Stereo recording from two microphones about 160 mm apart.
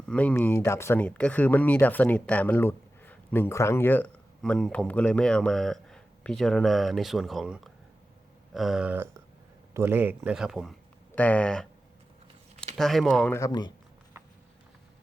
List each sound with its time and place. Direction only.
0.1 s speech: 10° left (ahead or behind)
8.5 s a sound: centre (ahead or behind)
9.7 s speech: 15° right (ahead or behind); by 11.7 s 5° left (ahead or behind)
12.7 s speech: centre (ahead or behind)
13.3 s speech: 20° left (ahead or behind)